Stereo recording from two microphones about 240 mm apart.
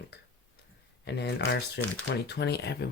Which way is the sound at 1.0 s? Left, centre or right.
Left.